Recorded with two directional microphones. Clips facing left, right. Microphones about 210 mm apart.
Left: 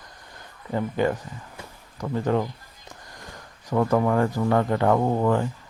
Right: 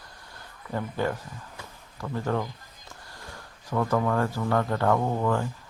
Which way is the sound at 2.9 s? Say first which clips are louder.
Left 3 dB; 15° left (ahead or behind).